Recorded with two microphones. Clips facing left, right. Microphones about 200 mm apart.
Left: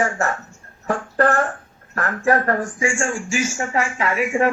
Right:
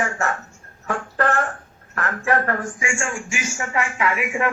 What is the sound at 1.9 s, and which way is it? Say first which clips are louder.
A woman's voice: left 3 dB; 35° left (ahead or behind).